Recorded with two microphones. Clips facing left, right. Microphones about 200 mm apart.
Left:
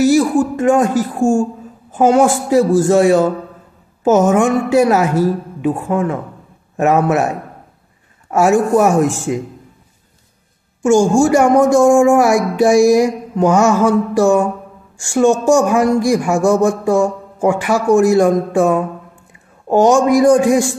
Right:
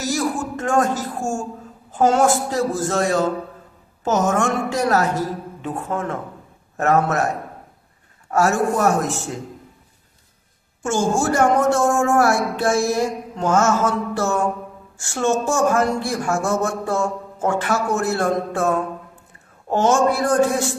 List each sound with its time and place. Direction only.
0.0 s a man's voice: 15° left (ahead or behind)
8.3 s a man's voice: 15° left (ahead or behind)
10.8 s a man's voice: 15° left (ahead or behind)